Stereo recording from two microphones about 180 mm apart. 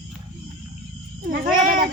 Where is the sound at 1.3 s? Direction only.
50° right (ahead or behind).